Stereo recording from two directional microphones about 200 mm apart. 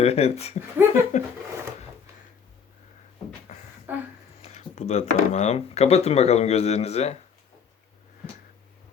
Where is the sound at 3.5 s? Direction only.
35° left (ahead or behind).